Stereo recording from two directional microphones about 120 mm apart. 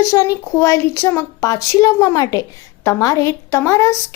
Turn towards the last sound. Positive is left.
turn(degrees=25)  # may be behind; listen again after turning